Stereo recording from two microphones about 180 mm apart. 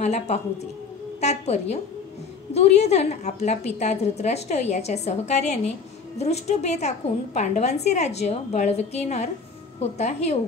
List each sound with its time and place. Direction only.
0.0 s a woman's voice: 40° left (ahead or behind)